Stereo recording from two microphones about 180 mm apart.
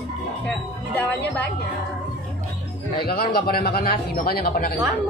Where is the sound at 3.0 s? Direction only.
60° left (ahead or behind).